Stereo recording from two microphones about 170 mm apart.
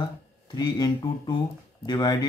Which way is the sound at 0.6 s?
25° left (ahead or behind).